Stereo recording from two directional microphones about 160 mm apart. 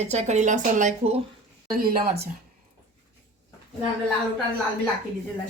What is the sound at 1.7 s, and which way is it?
Speech, 70° right (ahead or behind).